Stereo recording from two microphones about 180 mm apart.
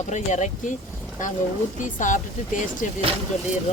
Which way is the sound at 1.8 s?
45° left (ahead or behind).